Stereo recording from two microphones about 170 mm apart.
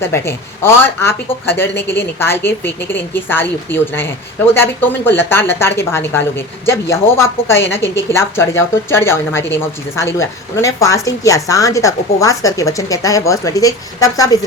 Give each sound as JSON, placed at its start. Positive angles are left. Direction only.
{"t": 0.0, "sound": "speech", "side_deg": 15}